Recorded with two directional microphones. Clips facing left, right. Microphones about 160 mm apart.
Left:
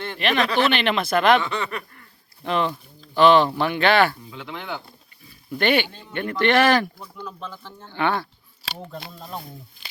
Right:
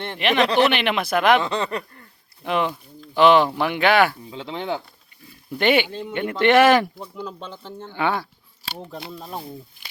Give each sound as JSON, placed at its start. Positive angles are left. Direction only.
{"t": 0.2, "sound": "speech", "side_deg": -15}
{"t": 1.4, "sound": "speech", "side_deg": -30}
{"t": 2.4, "sound": "speech", "side_deg": -15}
{"t": 4.3, "sound": "speech", "side_deg": -25}
{"t": 5.5, "sound": "speech", "side_deg": -15}